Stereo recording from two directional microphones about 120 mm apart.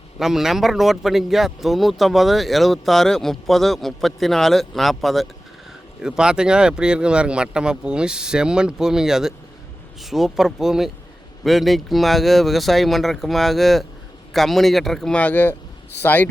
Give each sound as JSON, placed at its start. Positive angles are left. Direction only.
{"t": 0.2, "sound": "a man's voice", "side_deg": -5}